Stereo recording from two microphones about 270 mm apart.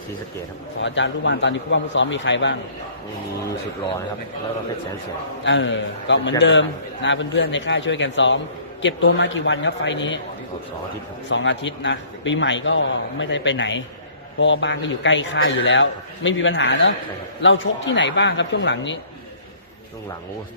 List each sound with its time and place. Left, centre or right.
0.8 s a man's voice: left
5.4 s a man's voice: left
11.3 s a man's voice: left